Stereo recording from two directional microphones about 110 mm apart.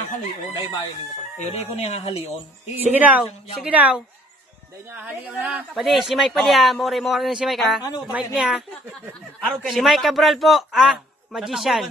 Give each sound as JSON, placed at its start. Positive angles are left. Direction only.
{"t": 1.4, "sound": "speech", "side_deg": 70}
{"t": 2.9, "sound": "speech", "side_deg": -15}